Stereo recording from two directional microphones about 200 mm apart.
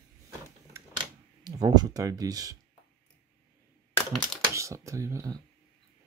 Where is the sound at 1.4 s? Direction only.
20° right (ahead or behind).